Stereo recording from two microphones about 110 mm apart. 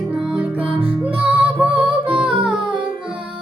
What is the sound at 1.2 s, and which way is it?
Music, 15° right (ahead or behind).